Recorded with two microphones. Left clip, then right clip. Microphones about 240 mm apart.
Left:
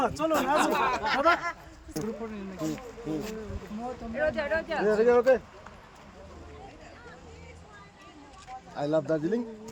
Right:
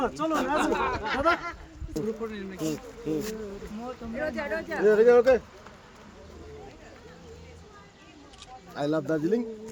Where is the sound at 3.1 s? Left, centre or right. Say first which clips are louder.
Right 4 dB; right.